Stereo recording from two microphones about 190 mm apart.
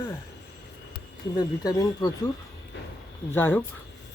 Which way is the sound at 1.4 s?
20° left (ahead or behind).